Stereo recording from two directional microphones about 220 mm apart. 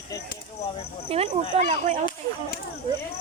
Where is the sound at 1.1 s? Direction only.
25° right (ahead or behind).